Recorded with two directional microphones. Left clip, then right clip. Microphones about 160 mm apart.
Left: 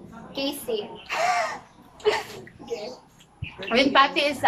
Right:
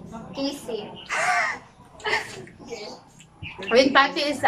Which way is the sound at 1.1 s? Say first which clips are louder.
Right 1 dB; 20° left (ahead or behind).